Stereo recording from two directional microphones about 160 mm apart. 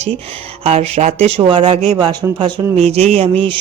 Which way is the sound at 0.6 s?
40° right (ahead or behind).